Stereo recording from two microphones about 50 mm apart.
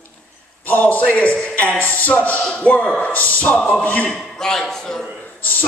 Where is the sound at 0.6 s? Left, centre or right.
Left.